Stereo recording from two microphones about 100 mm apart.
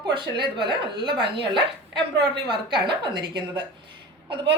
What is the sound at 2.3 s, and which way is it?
A woman's voice, 55° right (ahead or behind).